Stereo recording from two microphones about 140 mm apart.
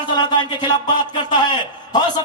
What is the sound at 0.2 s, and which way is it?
A man's voice, 30° left (ahead or behind).